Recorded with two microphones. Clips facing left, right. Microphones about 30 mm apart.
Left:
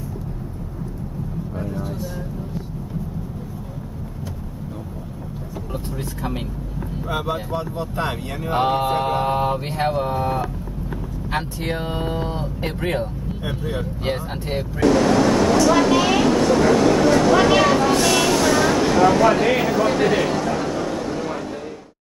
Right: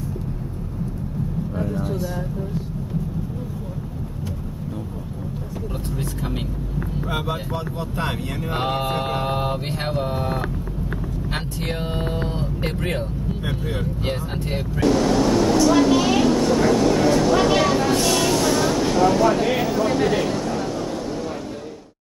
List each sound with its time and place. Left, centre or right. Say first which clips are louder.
1.5 s vehicle: right 3 dB; centre
1.8 s vehicle: right 3 dB; centre
5.9 s vehicle: even; centre
7.1 s speech: left 4 dB; centre
12.3 s vehicle: even; centre
13.6 s speech: left 1 dB; centre
14.0 s speech: left 1 dB; centre
15.2 s a sound: left 1 dB; centre
18.0 s vehicle: left 2 dB; centre